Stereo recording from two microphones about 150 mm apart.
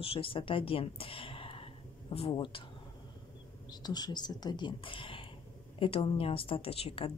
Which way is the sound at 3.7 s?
25° left (ahead or behind).